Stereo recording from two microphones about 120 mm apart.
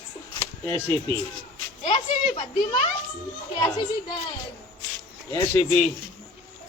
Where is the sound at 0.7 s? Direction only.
20° left (ahead or behind).